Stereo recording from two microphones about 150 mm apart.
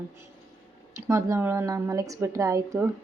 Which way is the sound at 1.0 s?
20° right (ahead or behind).